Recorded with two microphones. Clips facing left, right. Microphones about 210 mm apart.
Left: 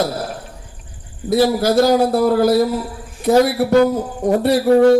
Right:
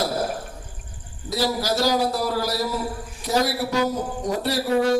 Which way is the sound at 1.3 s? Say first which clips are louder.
Left 9 dB; 55° left (ahead or behind).